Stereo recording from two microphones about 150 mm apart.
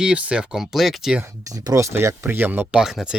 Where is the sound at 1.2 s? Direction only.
25° right (ahead or behind).